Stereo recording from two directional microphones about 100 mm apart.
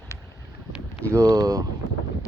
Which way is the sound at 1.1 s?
35° right (ahead or behind).